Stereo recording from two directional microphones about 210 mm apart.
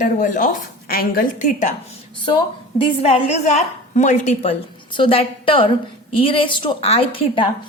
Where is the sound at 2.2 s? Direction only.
25° left (ahead or behind).